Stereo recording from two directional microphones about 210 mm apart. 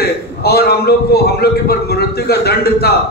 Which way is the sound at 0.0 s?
50° left (ahead or behind).